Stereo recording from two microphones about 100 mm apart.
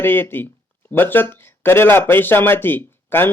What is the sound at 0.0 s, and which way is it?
Speech, 20° left (ahead or behind).